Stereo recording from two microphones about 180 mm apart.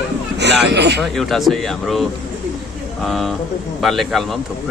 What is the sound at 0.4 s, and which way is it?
Speech, 70° right (ahead or behind).